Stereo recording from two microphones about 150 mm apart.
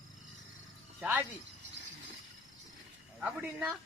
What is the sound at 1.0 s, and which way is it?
Speech, 10° right (ahead or behind).